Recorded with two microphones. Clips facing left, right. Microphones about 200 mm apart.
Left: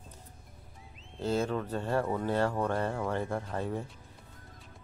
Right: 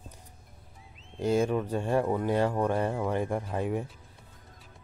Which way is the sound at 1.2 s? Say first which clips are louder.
Right 4 dB; 15° right (ahead or behind).